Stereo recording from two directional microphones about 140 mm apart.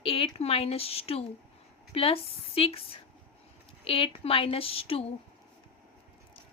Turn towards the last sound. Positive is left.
turn(degrees=40)  # may be behind; listen again after turning